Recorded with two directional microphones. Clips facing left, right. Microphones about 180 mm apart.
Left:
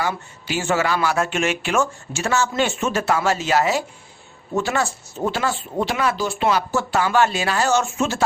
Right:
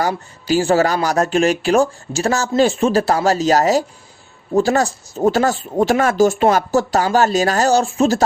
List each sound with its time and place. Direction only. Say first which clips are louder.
0.0 s speech: right 5 dB; 35° right (ahead or behind)